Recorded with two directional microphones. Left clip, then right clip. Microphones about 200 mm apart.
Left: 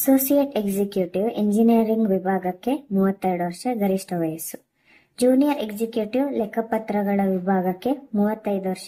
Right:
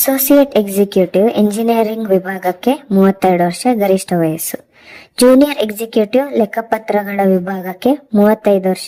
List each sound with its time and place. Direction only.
0.0 s a woman's voice: 40° right (ahead or behind)